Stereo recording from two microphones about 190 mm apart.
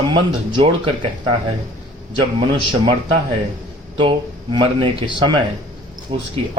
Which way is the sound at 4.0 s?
25° right (ahead or behind).